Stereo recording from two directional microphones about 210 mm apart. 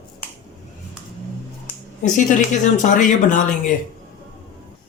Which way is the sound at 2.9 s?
35° left (ahead or behind).